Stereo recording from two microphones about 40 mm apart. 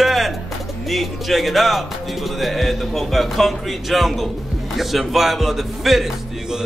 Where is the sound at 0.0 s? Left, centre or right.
Centre.